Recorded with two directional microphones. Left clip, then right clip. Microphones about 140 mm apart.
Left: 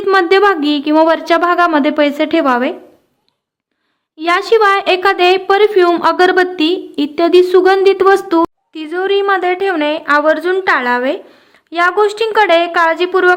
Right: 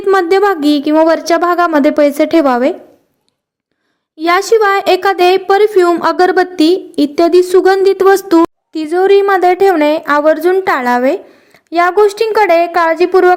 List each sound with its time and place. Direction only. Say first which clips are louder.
0.1 s a woman's voice: even; 30° right (ahead or behind)
4.2 s a woman's voice: right 1 dB; 30° right (ahead or behind)
12.0 s speech: right 2 dB; 25° right (ahead or behind)